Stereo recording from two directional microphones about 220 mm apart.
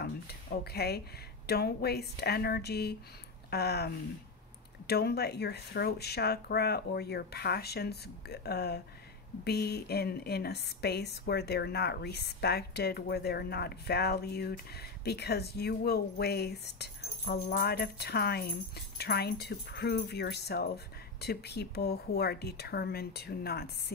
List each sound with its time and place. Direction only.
0.0 s speech: 45° left (ahead or behind)